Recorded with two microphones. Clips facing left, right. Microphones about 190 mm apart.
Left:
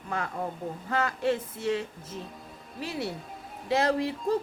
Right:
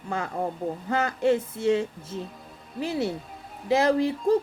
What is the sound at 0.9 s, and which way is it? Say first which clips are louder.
Speech: right 4 dB; 25° right (ahead or behind).